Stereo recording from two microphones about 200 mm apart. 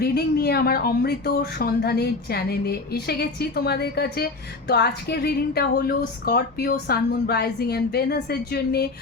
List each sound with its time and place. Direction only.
0.0 s speech: 50° left (ahead or behind)